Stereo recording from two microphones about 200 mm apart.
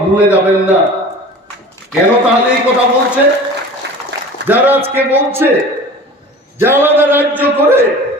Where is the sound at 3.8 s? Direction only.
60° right (ahead or behind).